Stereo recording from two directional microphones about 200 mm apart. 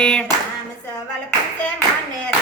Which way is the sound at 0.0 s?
5° left (ahead or behind).